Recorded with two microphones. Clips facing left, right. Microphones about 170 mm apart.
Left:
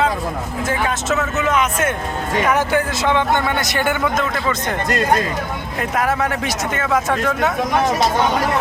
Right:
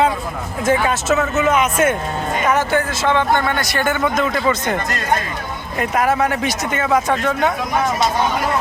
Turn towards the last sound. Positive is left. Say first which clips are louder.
# right 1 dB
turn(degrees=5)  # may be behind; listen again after turning